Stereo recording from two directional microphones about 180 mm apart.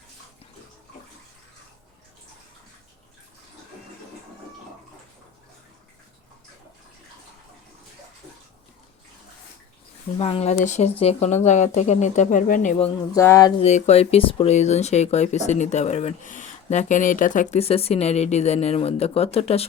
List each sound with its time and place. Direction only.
10.2 s speech: 35° left (ahead or behind)
13.1 s music: 15° left (ahead or behind)
13.6 s speech: 40° left (ahead or behind)